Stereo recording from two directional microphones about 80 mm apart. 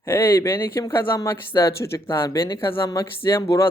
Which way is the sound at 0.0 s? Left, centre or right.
Left.